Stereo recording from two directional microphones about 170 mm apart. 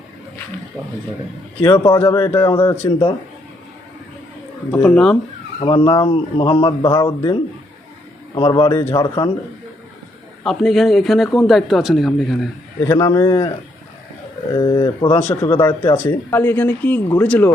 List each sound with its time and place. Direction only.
1.6 s speech: 25° left (ahead or behind)
4.7 s speech: 10° left (ahead or behind)
5.5 s speech: 30° left (ahead or behind)
8.4 s speech: 30° left (ahead or behind)
10.4 s a man's voice: centre (ahead or behind)
12.8 s speech: 20° left (ahead or behind)
14.5 s speech: 25° left (ahead or behind)
15.2 s speech: 15° left (ahead or behind)